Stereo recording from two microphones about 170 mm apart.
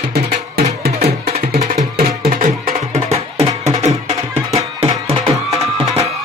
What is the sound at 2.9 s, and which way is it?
Music, 40° right (ahead or behind).